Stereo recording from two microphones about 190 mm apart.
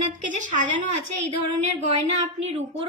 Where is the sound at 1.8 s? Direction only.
35° right (ahead or behind).